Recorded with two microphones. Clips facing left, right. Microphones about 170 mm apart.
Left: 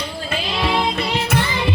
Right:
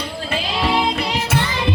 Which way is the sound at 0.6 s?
10° right (ahead or behind).